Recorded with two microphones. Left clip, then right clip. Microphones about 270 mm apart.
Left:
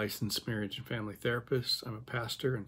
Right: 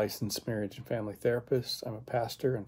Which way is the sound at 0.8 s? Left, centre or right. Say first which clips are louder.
Right 6 dB; centre.